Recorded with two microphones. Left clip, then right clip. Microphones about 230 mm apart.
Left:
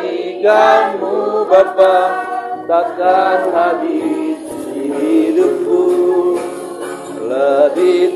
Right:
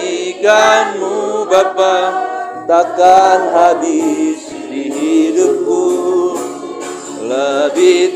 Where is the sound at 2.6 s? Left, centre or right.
Right.